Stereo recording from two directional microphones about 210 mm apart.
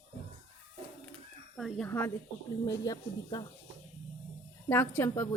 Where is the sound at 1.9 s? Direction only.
10° left (ahead or behind).